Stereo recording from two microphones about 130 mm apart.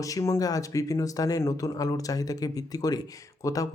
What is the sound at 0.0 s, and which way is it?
Speech, 25° left (ahead or behind).